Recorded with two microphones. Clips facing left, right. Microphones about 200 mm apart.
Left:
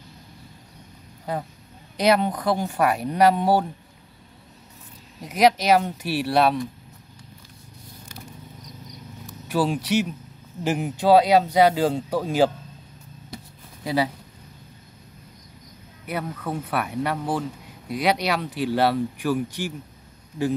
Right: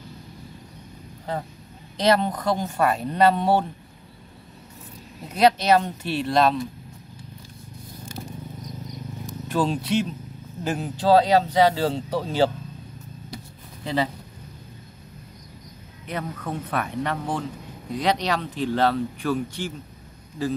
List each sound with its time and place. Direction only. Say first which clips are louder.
2.0 s speech: left 1 dB; 10° left (ahead or behind)
5.2 s speech: even; 10° left (ahead or behind)
9.5 s speech: left 1 dB; 10° left (ahead or behind)
9.8 s speech: left 1 dB; 75° left (ahead or behind)
10.8 s speech: left 1 dB; 15° left (ahead or behind)
13.8 s speech: left 1 dB; 10° left (ahead or behind)
16.1 s speech: left 1 dB; 10° left (ahead or behind)